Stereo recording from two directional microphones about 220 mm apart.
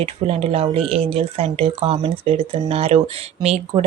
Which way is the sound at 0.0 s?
25° right (ahead or behind).